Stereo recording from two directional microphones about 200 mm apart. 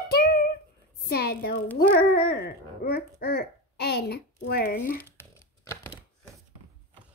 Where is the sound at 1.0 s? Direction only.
50° left (ahead or behind).